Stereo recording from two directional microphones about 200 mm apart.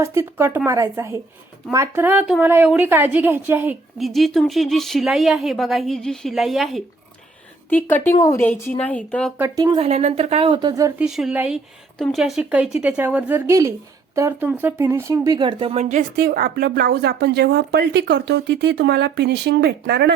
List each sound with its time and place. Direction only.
0.0 s a woman's voice: 15° right (ahead or behind); by 9.3 s 5° left (ahead or behind)
9.4 s a woman's voice: 15° right (ahead or behind)
9.7 s a woman's voice: 30° right (ahead or behind); by 11.0 s 15° right (ahead or behind)
11.0 s a woman's voice: 5° right (ahead or behind); by 20.1 s 55° right (ahead or behind)